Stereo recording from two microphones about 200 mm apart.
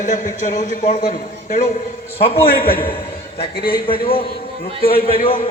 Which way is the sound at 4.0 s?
25° left (ahead or behind).